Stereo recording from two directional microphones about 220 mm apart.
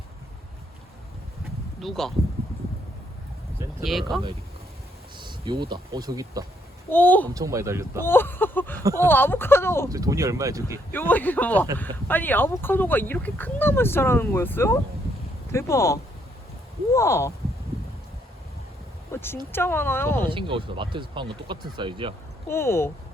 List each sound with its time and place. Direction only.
1.8 s speech: centre (ahead or behind)
4.1 s speech: centre (ahead or behind)
5.1 s speech: 20° right (ahead or behind)
6.9 s speech: 10° left (ahead or behind)
7.3 s speech: 15° right (ahead or behind)
8.0 s speech: 10° left (ahead or behind)
8.8 s speech: 15° right (ahead or behind)
9.0 s speech: 10° left (ahead or behind)
9.9 s speech: 15° right (ahead or behind)
10.9 s speech: 10° left (ahead or behind)
19.1 s a sound: 10° left (ahead or behind)
19.5 s speech: 10° left (ahead or behind)
20.3 s speech: 25° right (ahead or behind)
22.4 s speech: 10° left (ahead or behind)